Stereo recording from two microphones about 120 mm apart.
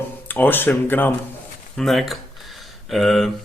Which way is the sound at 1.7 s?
Centre (ahead or behind).